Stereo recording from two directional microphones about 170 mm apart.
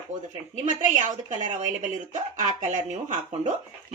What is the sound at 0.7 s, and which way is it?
A woman's voice, 45° right (ahead or behind).